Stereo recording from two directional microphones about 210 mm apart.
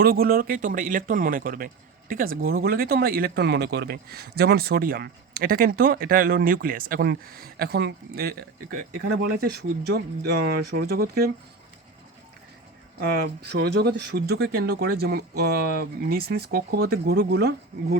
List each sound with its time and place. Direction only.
0.0 s speech: 45° right (ahead or behind)
13.0 s speech: 50° right (ahead or behind)